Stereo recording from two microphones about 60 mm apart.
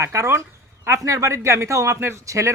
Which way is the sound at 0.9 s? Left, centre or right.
Right.